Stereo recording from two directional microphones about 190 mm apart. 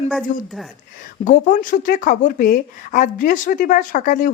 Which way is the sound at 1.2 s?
45° left (ahead or behind).